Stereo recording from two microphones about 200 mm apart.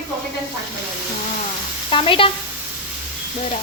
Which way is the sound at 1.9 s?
25° left (ahead or behind).